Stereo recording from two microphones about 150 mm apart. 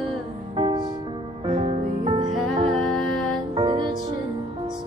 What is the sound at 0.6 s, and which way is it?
Music, 35° right (ahead or behind).